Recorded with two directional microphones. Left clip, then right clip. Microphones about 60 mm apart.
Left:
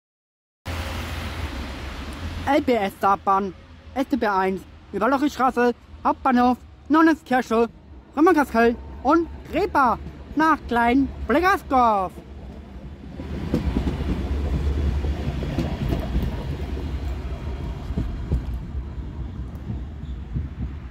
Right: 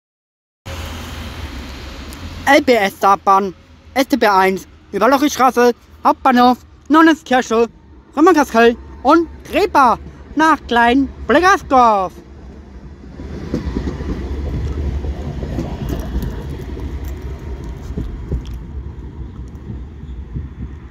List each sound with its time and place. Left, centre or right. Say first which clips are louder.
0.7 s vehicle: right 2 dB; centre
2.6 s speech: right 8 dB; right
3.9 s speech: right 9 dB; right
6.0 s a man's voice: right 8 dB; right
7.0 s speech: right 7 dB; right
13.4 s train: right 3 dB; right
15.5 s vehicle: right 3 dB; right
16.0 s vehicle: right 3 dB; right